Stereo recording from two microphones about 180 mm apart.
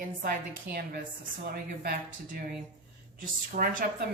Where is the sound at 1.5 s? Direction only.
55° right (ahead or behind).